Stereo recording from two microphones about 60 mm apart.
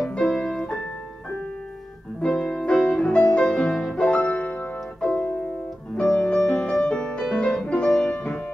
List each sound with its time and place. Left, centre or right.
0.0 s music: centre
2.2 s music: centre
5.9 s music: centre
8.1 s music: left